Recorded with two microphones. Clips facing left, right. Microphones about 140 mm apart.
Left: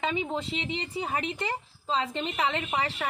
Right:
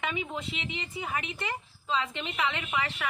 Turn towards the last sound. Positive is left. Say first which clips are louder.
# left 2 dB
turn(degrees=35)  # may be behind; listen again after turning